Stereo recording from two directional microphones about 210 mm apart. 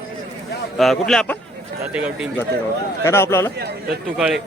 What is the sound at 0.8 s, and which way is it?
Speech, centre (ahead or behind).